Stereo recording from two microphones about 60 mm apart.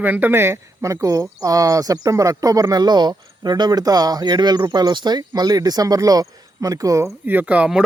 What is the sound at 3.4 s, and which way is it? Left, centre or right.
Speech, right.